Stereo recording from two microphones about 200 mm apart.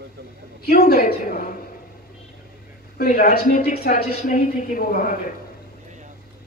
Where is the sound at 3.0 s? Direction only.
45° left (ahead or behind).